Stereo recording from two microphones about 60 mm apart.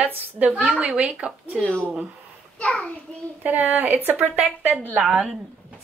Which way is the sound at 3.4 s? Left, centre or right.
Right.